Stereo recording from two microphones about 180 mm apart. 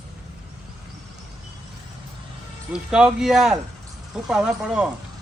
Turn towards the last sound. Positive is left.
turn(degrees=-5)  # may be behind; listen again after turning